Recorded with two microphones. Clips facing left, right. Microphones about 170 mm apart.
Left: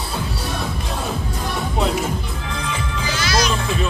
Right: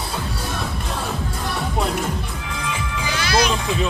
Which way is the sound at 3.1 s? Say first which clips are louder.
Right 1 dB; 60° right (ahead or behind).